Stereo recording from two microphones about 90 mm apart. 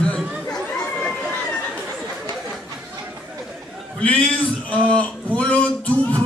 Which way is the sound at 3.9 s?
10° left (ahead or behind).